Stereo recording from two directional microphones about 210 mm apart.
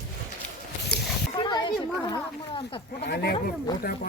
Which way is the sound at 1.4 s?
20° left (ahead or behind).